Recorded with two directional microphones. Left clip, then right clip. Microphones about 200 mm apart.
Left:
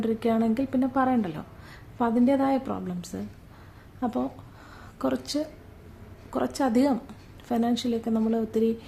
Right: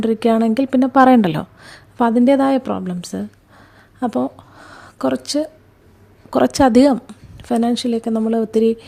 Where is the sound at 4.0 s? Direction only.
40° right (ahead or behind).